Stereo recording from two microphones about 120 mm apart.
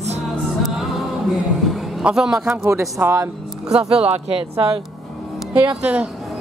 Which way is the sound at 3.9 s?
60° right (ahead or behind).